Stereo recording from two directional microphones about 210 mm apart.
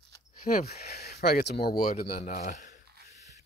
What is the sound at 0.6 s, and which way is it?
Speech, 50° left (ahead or behind).